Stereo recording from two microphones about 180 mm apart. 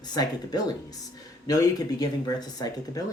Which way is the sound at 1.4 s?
20° left (ahead or behind).